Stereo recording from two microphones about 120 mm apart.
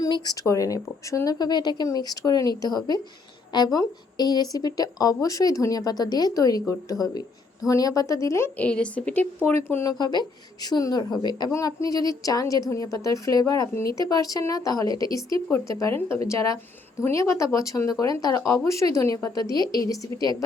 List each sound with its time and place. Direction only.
0.0 s a woman's voice: 30° left (ahead or behind)
8.6 s a woman's voice: 10° left (ahead or behind)
10.0 s a woman's voice: 35° left (ahead or behind)
15.4 s a woman's voice: 20° left (ahead or behind)